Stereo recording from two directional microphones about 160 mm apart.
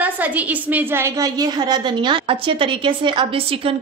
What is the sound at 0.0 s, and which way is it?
A woman's voice, 10° right (ahead or behind).